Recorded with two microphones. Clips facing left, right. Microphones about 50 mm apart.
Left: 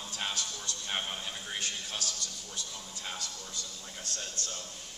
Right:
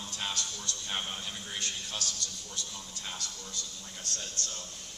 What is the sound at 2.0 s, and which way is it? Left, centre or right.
Speech, right.